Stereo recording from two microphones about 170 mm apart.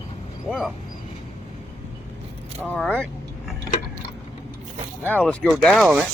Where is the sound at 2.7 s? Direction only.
5° left (ahead or behind).